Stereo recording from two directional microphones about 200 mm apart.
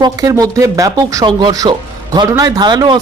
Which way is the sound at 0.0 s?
20° right (ahead or behind).